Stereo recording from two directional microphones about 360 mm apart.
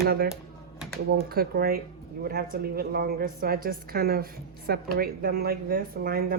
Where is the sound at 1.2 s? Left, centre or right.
Right.